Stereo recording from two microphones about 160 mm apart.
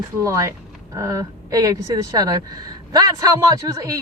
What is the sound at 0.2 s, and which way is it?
A woman's voice, 20° right (ahead or behind).